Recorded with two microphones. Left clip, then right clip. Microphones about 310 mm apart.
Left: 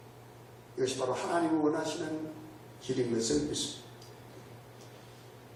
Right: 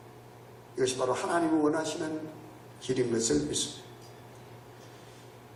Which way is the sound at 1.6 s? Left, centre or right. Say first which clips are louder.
Right 2 dB; centre.